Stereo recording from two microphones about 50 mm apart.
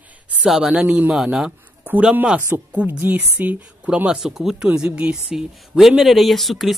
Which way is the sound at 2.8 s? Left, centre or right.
Right.